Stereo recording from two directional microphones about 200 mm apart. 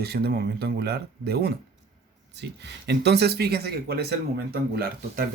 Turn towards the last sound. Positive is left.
turn(degrees=-45)  # may be behind; listen again after turning